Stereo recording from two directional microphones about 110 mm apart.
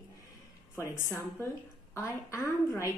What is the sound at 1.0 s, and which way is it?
A woman's voice, 25° left (ahead or behind).